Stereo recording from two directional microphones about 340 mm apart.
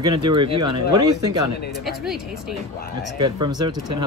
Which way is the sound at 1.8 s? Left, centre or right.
Centre.